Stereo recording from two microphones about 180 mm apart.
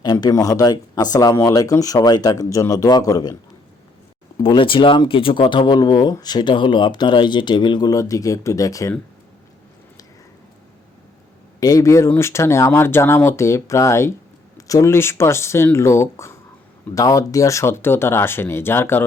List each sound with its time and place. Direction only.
0.0 s speech: 20° left (ahead or behind)
4.4 s speech: 30° left (ahead or behind)
11.6 s speech: 20° left (ahead or behind)